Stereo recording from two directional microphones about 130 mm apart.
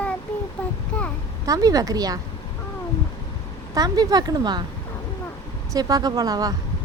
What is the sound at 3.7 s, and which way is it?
Speech, 30° right (ahead or behind).